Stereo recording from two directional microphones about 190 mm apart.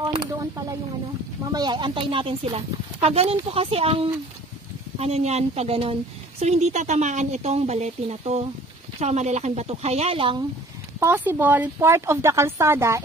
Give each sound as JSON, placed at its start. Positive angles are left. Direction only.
{"t": 0.1, "sound": "speech", "side_deg": -20}
{"t": 11.0, "sound": "speech", "side_deg": -10}